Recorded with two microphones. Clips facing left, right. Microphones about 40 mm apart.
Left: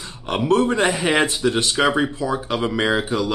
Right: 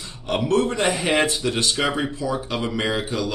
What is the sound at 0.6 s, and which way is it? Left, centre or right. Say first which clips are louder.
Speech: left 2 dB; left.